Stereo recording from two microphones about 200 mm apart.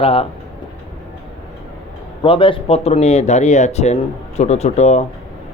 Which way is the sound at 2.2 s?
25° left (ahead or behind).